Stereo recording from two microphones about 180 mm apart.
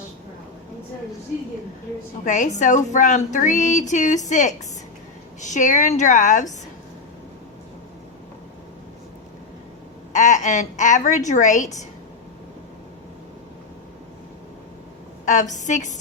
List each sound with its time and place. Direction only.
2.2 s a woman's voice: 45° left (ahead or behind)
10.1 s a woman's voice: 40° left (ahead or behind)
15.2 s a woman's voice: 45° left (ahead or behind)